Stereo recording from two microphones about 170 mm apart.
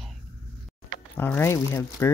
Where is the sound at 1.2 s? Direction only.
10° left (ahead or behind).